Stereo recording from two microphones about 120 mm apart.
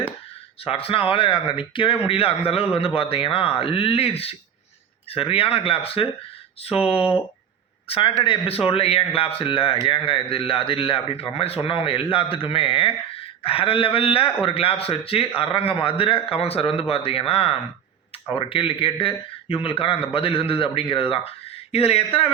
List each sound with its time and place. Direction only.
0.6 s speech: 55° left (ahead or behind)
7.9 s speech: 45° left (ahead or behind)